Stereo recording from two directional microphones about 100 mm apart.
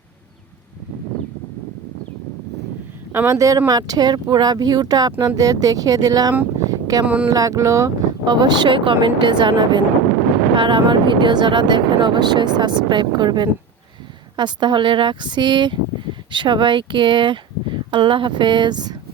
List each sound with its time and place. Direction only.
3.1 s speech: 20° right (ahead or behind)
3.3 s speech: 35° right (ahead or behind)
6.7 s a sound: 35° right (ahead or behind)
7.0 s a sound: 15° right (ahead or behind)
7.3 s speech: 35° right (ahead or behind)
8.2 s speech: 45° right (ahead or behind)